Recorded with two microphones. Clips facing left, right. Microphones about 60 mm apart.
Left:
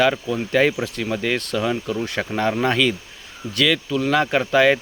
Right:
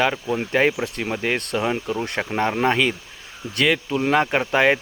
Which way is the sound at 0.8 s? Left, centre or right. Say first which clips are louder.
Left 1 dB; right.